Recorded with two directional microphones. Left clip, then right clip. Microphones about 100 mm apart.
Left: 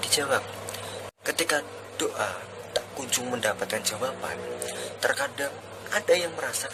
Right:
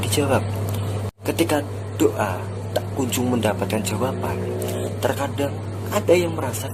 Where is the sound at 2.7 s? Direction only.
30° left (ahead or behind).